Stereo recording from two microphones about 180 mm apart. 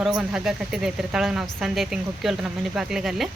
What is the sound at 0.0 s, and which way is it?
Speech, 5° right (ahead or behind).